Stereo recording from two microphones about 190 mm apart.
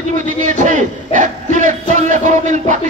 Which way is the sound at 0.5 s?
40° right (ahead or behind).